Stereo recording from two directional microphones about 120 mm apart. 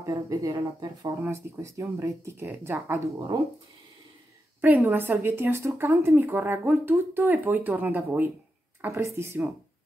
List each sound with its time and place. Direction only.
0.0 s speech: 25° right (ahead or behind)
1.2 s speech: 25° right (ahead or behind)
4.6 s speech: 15° right (ahead or behind)